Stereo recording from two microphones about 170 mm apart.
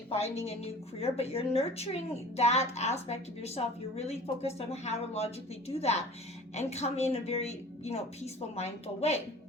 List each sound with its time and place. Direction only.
0.1 s a woman's voice: 35° left (ahead or behind)